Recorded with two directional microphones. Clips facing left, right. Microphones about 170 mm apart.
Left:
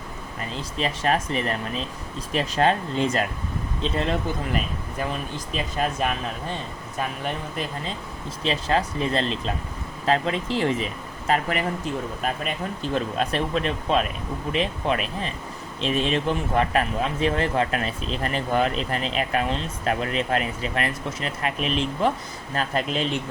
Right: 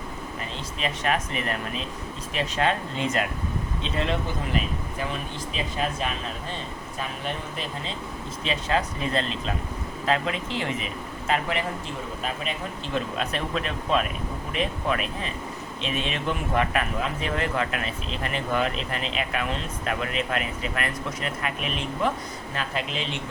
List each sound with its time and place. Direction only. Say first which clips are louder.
0.8 s speech: left 3 dB; 35° left (ahead or behind)
5.7 s speech: left 4 dB; 50° left (ahead or behind)
8.4 s speech: left 3 dB; 35° left (ahead or behind)
12.9 s speech: left 3 dB; 35° left (ahead or behind)
22.5 s speech: left 5 dB; 45° left (ahead or behind)